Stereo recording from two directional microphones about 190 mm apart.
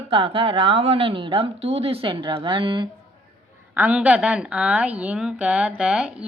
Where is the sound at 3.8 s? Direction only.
5° right (ahead or behind).